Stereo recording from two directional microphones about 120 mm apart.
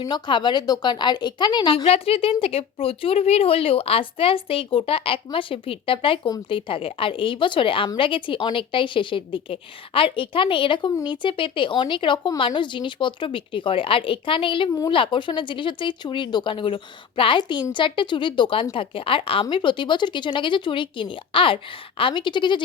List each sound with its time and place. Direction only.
0.1 s a woman's voice: 40° left (ahead or behind)
1.8 s speech: 55° left (ahead or behind)